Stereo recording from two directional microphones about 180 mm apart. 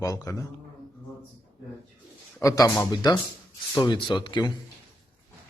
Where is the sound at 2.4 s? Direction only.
20° left (ahead or behind).